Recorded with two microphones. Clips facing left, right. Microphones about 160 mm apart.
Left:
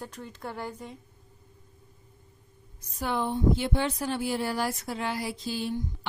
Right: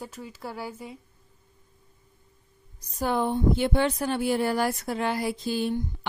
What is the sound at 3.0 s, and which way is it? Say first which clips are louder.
A woman's voice: right 3 dB; 45° right (ahead or behind).